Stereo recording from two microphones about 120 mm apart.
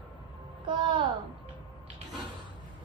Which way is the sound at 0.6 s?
40° right (ahead or behind).